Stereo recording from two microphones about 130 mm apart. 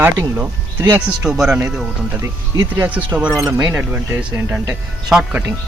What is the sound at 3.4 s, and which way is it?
Speech, 20° right (ahead or behind).